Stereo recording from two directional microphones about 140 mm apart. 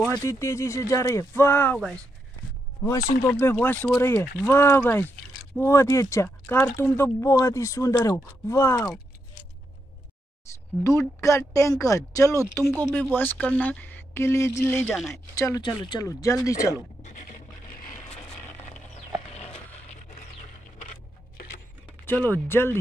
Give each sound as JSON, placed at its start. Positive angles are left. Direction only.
{"t": 0.2, "sound": "speech", "side_deg": 20}
{"t": 2.8, "sound": "speech", "side_deg": 25}
{"t": 10.8, "sound": "speech", "side_deg": 20}
{"t": 15.6, "sound": "speech", "side_deg": 35}
{"t": 17.0, "sound": "a sound", "side_deg": 70}
{"t": 19.3, "sound": "a sound", "side_deg": 50}
{"t": 22.0, "sound": "speech", "side_deg": 10}